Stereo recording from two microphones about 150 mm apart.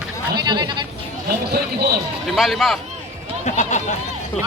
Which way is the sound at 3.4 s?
50° left (ahead or behind).